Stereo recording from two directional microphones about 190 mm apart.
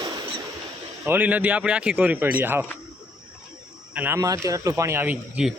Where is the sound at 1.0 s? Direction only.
10° right (ahead or behind).